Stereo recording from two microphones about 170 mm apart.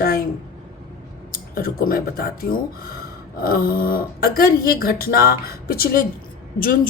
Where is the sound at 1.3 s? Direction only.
60° left (ahead or behind).